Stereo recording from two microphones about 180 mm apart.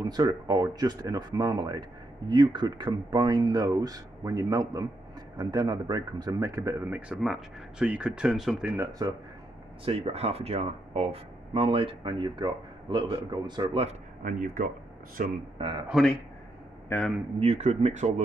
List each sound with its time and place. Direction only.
0.0 s speech: 20° right (ahead or behind); by 8.7 s centre (ahead or behind)
8.7 s speech: 20° right (ahead or behind)
9.8 s speech: 35° right (ahead or behind)
13.8 s speech: 50° right (ahead or behind)
15.5 s speech: 30° right (ahead or behind)
15.9 s speech: centre (ahead or behind)
17.4 s speech: 35° right (ahead or behind)